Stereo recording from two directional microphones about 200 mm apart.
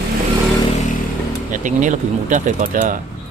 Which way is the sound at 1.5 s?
40° right (ahead or behind).